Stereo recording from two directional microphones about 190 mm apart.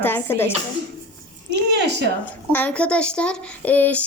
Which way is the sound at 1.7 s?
60° right (ahead or behind).